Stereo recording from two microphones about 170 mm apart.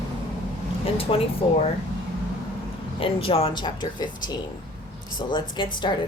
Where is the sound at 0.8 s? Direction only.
35° left (ahead or behind).